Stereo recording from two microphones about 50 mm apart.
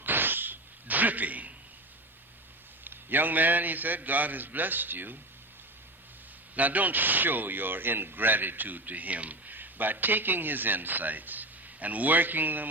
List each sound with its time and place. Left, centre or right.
0.0 s a sound: right
2.8 s speech: right
6.6 s speech: right